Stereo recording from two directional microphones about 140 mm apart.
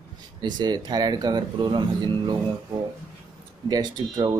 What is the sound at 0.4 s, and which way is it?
Speech, 30° right (ahead or behind).